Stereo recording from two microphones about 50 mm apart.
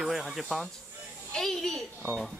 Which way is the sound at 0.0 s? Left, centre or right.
Centre.